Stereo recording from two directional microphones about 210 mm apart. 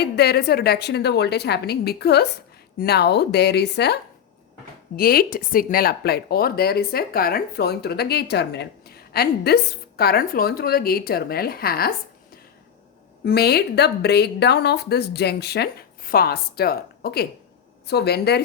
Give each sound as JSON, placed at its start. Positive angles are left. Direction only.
{"t": 0.0, "sound": "a woman's voice", "side_deg": 50}
{"t": 4.9, "sound": "a woman's voice", "side_deg": 45}
{"t": 13.2, "sound": "a woman's voice", "side_deg": 50}